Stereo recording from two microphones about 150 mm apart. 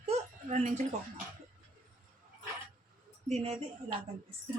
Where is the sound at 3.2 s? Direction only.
45° right (ahead or behind).